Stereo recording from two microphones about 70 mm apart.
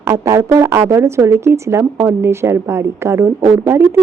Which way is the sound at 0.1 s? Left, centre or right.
Right.